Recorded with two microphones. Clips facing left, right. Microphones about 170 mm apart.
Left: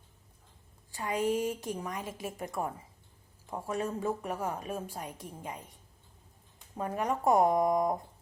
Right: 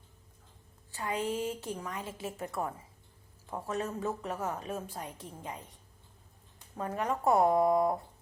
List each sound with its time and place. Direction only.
0.9 s a woman's voice: 15° left (ahead or behind)